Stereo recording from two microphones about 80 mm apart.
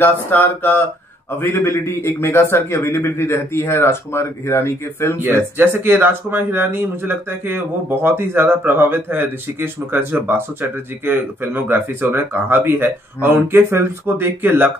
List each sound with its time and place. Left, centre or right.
0.0 s a sound: left
1.4 s a man's voice: left
5.2 s speech: right